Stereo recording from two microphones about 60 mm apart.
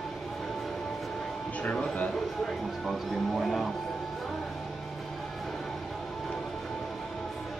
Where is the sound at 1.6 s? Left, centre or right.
Left.